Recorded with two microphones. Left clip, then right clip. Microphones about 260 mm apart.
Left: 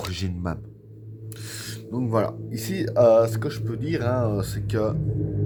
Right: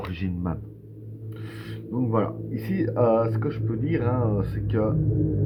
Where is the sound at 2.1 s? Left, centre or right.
Left.